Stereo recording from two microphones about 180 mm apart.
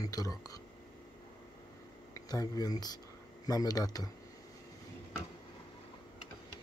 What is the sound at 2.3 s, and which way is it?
Speech, 20° left (ahead or behind).